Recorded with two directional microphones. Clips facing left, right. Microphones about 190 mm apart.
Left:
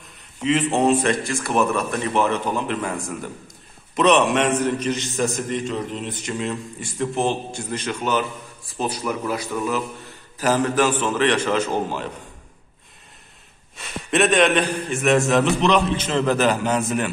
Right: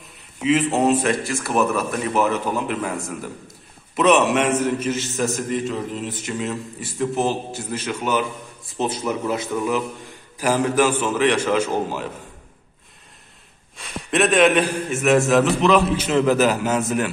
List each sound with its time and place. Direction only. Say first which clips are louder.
0.4 s speech: right 1 dB; 5° right (ahead or behind)
8.7 s a man's voice: right 2 dB; 25° right (ahead or behind)
13.7 s speech: even; centre (ahead or behind)